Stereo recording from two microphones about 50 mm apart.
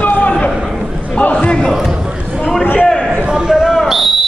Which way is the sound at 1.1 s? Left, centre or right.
Left.